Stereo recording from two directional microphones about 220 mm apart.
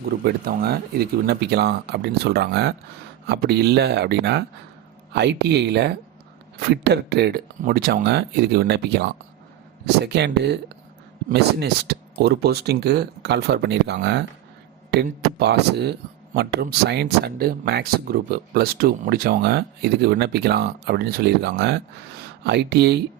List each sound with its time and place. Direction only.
0.3 s speech: 45° right (ahead or behind)